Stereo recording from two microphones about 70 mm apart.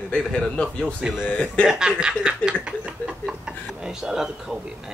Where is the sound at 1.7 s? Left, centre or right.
Centre.